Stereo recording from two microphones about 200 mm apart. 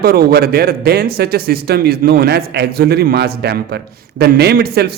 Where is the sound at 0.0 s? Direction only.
50° right (ahead or behind).